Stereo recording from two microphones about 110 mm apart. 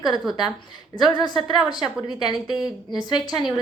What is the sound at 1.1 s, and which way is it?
A woman's voice, 40° left (ahead or behind).